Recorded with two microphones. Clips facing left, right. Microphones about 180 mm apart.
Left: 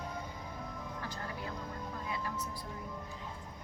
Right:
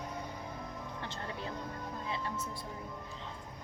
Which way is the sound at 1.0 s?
25° right (ahead or behind).